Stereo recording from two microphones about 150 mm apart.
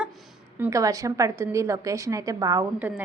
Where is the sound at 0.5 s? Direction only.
20° right (ahead or behind).